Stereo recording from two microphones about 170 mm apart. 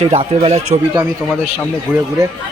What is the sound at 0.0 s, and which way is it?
Speech, 35° right (ahead or behind).